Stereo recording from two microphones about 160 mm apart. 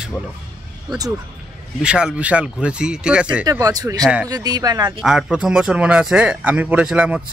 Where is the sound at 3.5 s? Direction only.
20° right (ahead or behind).